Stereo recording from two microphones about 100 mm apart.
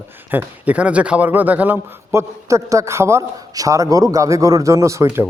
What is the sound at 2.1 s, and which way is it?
A man's voice, 30° right (ahead or behind).